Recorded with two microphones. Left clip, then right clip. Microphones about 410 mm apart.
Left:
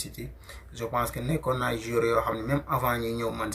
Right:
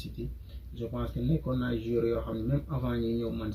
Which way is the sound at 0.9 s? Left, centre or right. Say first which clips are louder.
Left 7 dB; left.